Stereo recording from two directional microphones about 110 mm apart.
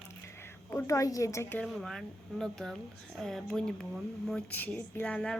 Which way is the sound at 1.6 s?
Centre (ahead or behind).